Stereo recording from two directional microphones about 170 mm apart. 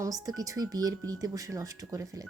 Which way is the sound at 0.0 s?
20° right (ahead or behind).